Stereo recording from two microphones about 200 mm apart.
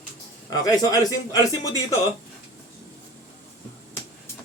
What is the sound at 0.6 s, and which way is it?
Speech, 20° left (ahead or behind).